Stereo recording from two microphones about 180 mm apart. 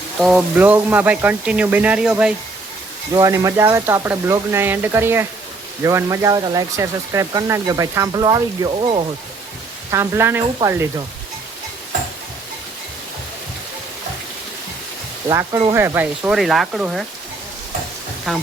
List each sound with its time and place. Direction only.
0.2 s speech: 5° right (ahead or behind)
3.2 s speech: 20° right (ahead or behind)
9.9 s speech: 15° right (ahead or behind)
15.3 s speech: 20° right (ahead or behind); by 17.1 s centre (ahead or behind)
18.3 s speech: centre (ahead or behind)